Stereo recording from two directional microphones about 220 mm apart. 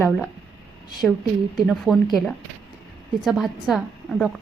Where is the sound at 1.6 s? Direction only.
Centre (ahead or behind).